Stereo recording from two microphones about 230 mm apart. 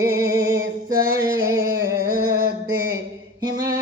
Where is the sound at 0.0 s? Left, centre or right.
Centre.